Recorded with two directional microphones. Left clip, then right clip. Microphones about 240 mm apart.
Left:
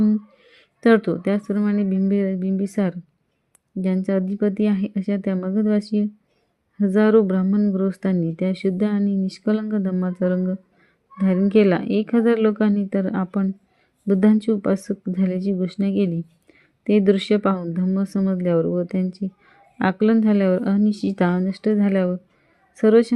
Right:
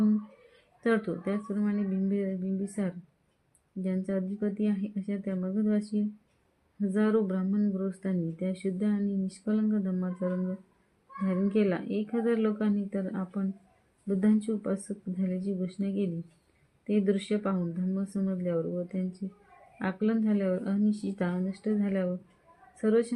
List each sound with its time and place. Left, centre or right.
0.0 s speech: left